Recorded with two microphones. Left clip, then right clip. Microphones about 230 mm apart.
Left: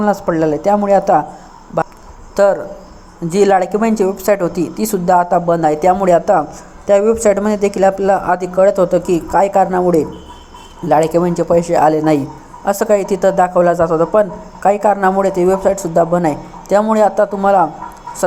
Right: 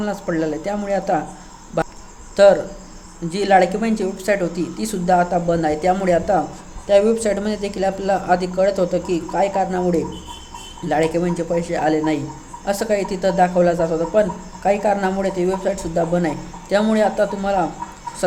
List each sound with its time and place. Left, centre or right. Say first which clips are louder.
0.0 s a woman's voice: left 8 dB; centre
1.8 s a sound: left 5 dB; centre
2.3 s a woman's voice: even; centre